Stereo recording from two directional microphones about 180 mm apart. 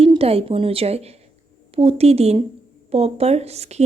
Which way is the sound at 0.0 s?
30° right (ahead or behind).